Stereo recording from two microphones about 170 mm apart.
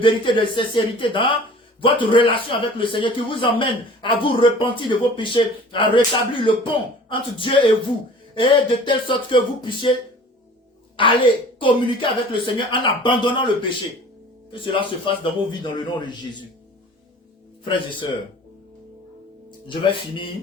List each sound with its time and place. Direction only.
0.0 s a man's voice: 30° left (ahead or behind)
10.9 s a man's voice: 30° left (ahead or behind)
19.6 s a man's voice: 30° left (ahead or behind)